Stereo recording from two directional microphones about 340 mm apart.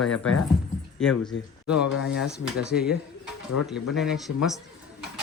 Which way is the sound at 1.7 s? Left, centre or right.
Centre.